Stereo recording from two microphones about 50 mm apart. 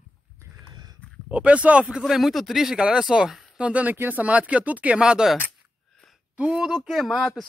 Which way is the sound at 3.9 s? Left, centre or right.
Right.